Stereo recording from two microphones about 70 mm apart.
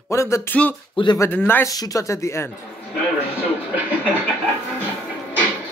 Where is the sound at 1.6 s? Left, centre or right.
Left.